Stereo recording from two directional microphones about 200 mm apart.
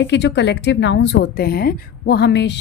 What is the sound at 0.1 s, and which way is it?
A woman's voice, 60° left (ahead or behind).